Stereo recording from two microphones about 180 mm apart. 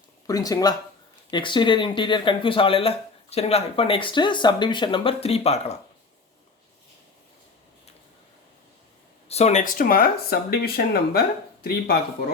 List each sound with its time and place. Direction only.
0.3 s speech: 20° left (ahead or behind); by 5.7 s 35° left (ahead or behind)
9.3 s speech: 40° left (ahead or behind); by 11.2 s 60° left (ahead or behind)